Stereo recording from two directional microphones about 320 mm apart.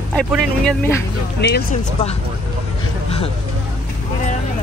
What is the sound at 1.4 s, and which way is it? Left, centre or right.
Speech, left.